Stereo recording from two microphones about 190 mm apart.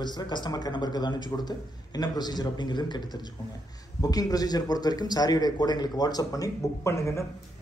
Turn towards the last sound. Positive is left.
turn(degrees=15)  # may be behind; listen again after turning